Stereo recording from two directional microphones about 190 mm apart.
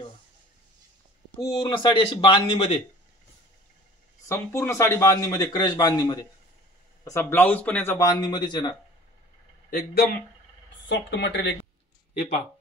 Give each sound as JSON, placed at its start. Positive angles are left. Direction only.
{"t": 1.4, "sound": "speech", "side_deg": 30}
{"t": 4.3, "sound": "speech", "side_deg": 15}
{"t": 9.7, "sound": "speech", "side_deg": 55}
{"t": 10.9, "sound": "speech", "side_deg": 65}